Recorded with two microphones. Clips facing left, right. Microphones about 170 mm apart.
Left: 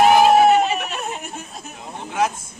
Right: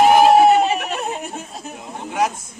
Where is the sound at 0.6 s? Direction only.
35° right (ahead or behind).